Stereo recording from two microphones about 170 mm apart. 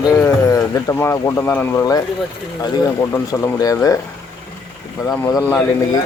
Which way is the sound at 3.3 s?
20° left (ahead or behind).